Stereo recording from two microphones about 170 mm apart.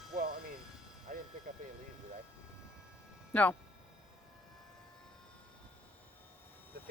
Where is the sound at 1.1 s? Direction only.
55° right (ahead or behind).